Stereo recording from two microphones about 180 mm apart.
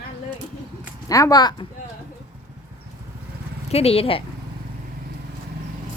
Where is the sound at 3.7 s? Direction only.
35° left (ahead or behind).